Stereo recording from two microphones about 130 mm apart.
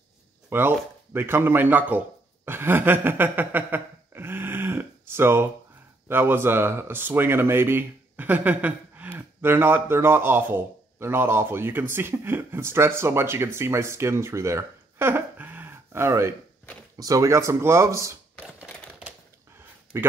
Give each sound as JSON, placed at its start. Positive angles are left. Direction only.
{"t": 0.5, "sound": "speech", "side_deg": -15}
{"t": 18.4, "sound": "typewriter", "side_deg": -10}
{"t": 19.9, "sound": "speech", "side_deg": -20}